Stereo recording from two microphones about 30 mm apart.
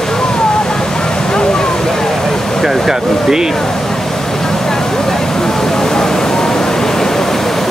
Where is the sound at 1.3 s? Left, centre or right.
Left.